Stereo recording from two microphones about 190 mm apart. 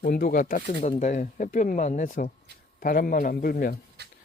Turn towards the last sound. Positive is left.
turn(degrees=-60)  # may be behind; listen again after turning